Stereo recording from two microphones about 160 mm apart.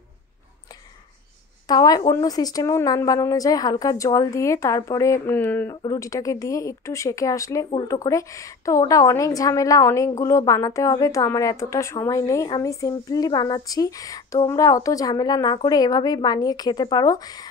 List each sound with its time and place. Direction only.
1.7 s speech: 25° left (ahead or behind)